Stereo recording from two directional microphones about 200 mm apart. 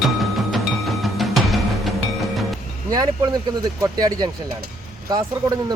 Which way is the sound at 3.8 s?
20° right (ahead or behind).